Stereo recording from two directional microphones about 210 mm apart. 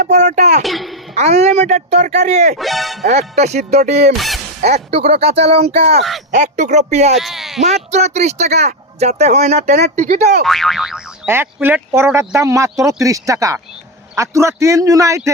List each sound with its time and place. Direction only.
0.1 s speech: 35° right (ahead or behind)
0.6 s a child's voice: centre (ahead or behind)
1.1 s speech: 30° right (ahead or behind)
2.6 s speech: centre (ahead or behind)
3.0 s speech: 30° right (ahead or behind)
7.2 s a sound: centre (ahead or behind)
7.6 s speech: 30° right (ahead or behind)
10.4 s speech: centre (ahead or behind); by 15.3 s 15° right (ahead or behind)